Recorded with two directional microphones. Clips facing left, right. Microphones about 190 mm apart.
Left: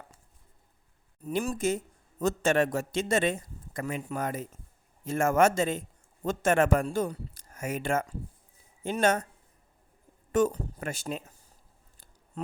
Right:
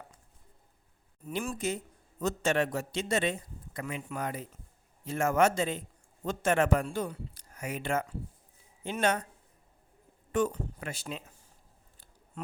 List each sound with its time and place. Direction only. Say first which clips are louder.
1.3 s a man's voice: left 5 dB; 45° left (ahead or behind)
10.3 s a man's voice: left 4 dB; 45° left (ahead or behind)